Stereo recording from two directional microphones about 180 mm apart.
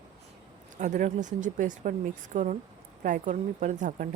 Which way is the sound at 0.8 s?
45° right (ahead or behind).